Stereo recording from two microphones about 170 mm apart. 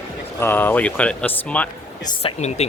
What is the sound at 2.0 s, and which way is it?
Speech, 35° left (ahead or behind).